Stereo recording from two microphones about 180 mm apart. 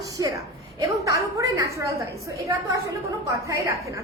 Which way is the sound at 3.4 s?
15° right (ahead or behind).